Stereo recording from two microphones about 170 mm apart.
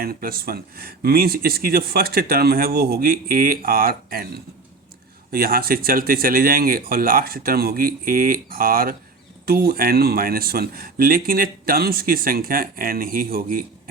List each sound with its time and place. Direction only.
0.0 s speech: 60° right (ahead or behind)